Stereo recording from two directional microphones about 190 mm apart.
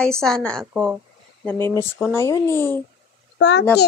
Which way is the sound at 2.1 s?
15° left (ahead or behind).